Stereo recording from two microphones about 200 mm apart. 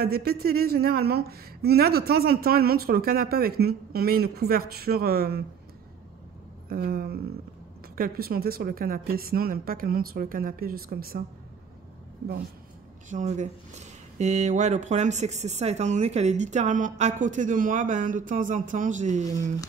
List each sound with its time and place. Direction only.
0.0 s speech: 50° right (ahead or behind)
6.7 s speech: 50° right (ahead or behind)
13.1 s speech: 35° right (ahead or behind)